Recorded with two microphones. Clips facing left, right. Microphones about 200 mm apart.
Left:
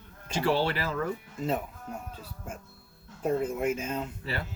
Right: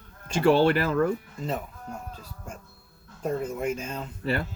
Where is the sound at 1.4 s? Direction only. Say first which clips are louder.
Left 1 dB; 5° left (ahead or behind).